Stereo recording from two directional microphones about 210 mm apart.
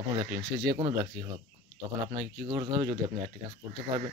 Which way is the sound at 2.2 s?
20° right (ahead or behind).